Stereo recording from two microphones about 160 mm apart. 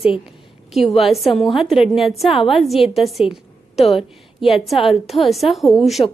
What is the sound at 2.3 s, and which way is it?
Speech, 35° left (ahead or behind).